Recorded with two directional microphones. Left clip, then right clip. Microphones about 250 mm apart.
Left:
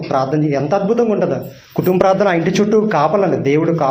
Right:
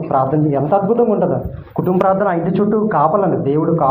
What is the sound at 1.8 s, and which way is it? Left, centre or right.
A man's voice, left.